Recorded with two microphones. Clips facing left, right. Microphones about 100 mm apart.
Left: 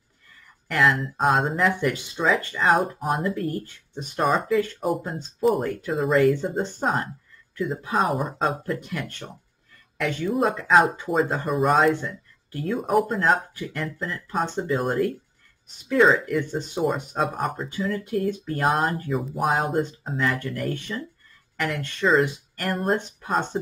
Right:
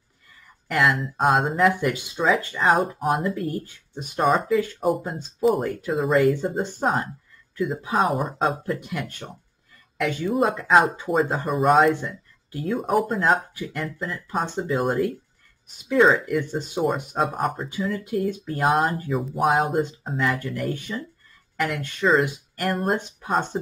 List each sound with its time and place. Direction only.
0.7 s speech: centre (ahead or behind)